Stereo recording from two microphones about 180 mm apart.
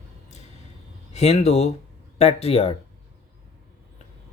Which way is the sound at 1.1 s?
35° left (ahead or behind).